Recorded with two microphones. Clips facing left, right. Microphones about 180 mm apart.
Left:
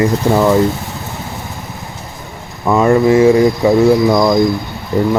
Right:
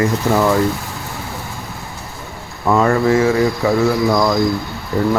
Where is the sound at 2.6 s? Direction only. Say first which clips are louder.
Left 4 dB; 15° left (ahead or behind).